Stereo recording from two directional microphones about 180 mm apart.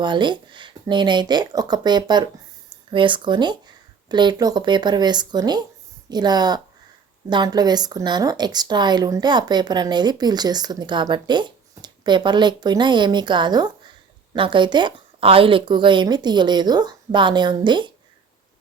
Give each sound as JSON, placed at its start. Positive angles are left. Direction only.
{"t": 0.0, "sound": "speech", "side_deg": -25}